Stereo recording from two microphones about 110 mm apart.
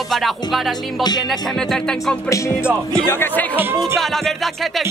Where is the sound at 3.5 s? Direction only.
20° right (ahead or behind).